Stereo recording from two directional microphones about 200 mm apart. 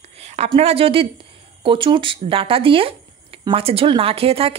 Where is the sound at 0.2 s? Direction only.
30° right (ahead or behind).